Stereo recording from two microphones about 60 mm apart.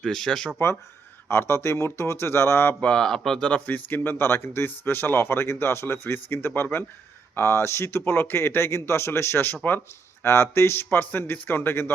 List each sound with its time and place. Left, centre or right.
0.0 s speech: centre
1.3 s speech: left
3.0 s speech: centre
3.7 s speech: left